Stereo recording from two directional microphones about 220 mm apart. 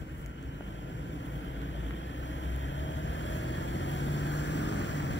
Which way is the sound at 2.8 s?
55° left (ahead or behind).